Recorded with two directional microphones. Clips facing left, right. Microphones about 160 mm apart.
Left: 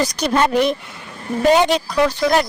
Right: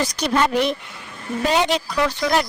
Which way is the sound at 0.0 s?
45° left (ahead or behind).